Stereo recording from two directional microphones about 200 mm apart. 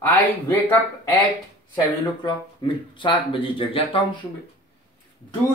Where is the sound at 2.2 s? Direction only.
25° left (ahead or behind).